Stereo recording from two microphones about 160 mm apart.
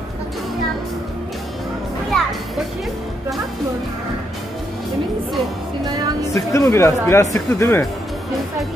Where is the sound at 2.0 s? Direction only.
Centre (ahead or behind).